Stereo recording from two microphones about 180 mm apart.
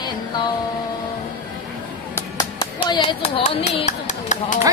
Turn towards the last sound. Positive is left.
turn(degrees=40)  # may be behind; listen again after turning